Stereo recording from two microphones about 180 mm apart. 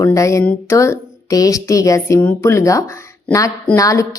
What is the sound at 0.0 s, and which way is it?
A woman's voice, 15° left (ahead or behind).